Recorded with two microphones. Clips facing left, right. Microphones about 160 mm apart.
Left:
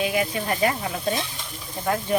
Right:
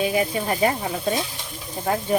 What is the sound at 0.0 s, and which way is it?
Speech, 30° right (ahead or behind).